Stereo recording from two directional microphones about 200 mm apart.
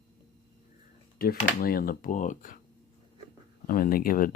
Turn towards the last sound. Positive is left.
turn(degrees=45)  # may be behind; listen again after turning